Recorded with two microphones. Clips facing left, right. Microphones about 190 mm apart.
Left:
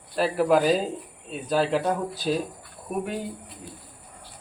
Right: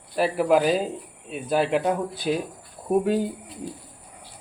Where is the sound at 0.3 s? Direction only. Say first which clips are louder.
Even; 5° right (ahead or behind).